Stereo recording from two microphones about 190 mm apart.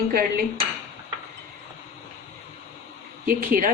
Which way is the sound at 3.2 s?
45° right (ahead or behind).